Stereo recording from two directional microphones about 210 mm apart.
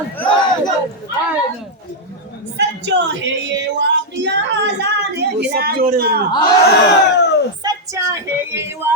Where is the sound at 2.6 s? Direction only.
60° right (ahead or behind).